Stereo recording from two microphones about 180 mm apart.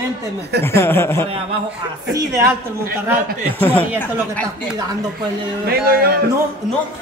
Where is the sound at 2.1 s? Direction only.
15° right (ahead or behind).